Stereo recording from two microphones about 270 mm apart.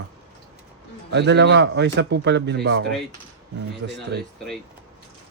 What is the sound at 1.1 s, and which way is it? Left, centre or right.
A man's voice, right.